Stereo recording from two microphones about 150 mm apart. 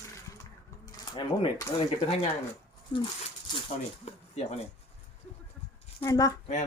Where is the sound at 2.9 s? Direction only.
35° left (ahead or behind).